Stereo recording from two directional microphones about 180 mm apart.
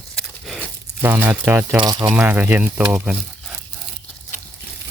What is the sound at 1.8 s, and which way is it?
Speech, 25° right (ahead or behind).